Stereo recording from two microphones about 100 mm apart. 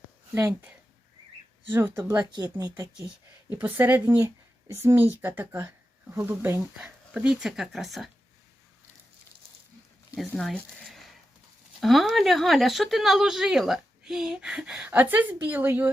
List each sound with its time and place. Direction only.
0.3 s speech: 20° right (ahead or behind)
1.7 s speech: 20° right (ahead or behind)
2.3 s speech: 45° right (ahead or behind)
3.5 s speech: 20° right (ahead or behind)
6.8 s speech: 10° right (ahead or behind)
10.3 s a sound: 5° left (ahead or behind)
11.8 s speech: centre (ahead or behind); by 15.9 s 20° right (ahead or behind)